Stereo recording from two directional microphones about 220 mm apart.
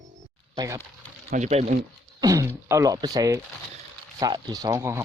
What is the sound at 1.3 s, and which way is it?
Speech, 30° right (ahead or behind).